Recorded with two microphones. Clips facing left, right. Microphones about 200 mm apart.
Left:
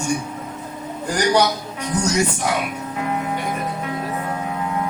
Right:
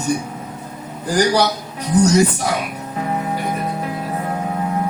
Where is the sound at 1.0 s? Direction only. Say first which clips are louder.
Right 2 dB; 35° right (ahead or behind).